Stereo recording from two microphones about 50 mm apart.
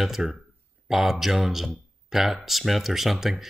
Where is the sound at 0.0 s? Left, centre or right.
Centre.